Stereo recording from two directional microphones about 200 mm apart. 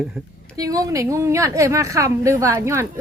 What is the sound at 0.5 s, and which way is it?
A woman's voice, 15° right (ahead or behind).